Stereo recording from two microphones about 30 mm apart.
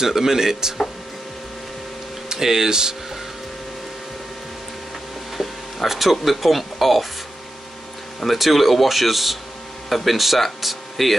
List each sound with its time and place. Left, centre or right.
0.0 s speech: centre
2.3 s speech: centre
5.9 s speech: centre
8.4 s speech: centre